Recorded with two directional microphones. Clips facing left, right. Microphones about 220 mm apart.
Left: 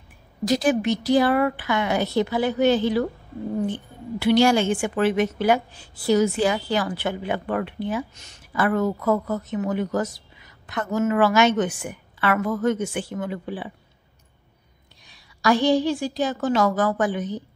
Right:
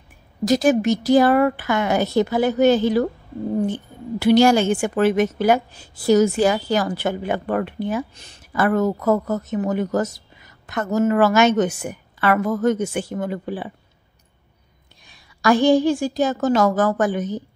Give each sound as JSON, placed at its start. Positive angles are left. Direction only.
{"t": 0.5, "sound": "a woman's voice", "side_deg": -45}
{"t": 15.0, "sound": "a woman's voice", "side_deg": -50}